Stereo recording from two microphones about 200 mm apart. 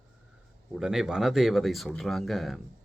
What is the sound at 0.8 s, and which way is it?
Speech, centre (ahead or behind).